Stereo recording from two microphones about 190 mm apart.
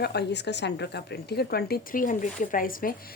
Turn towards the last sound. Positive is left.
turn(degrees=45)  # may be behind; listen again after turning